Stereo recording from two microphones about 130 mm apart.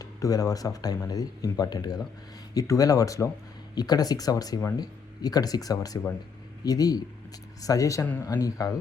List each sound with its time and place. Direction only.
0.0 s speech: 25° left (ahead or behind)